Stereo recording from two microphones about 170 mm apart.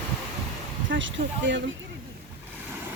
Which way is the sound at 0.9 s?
90° right.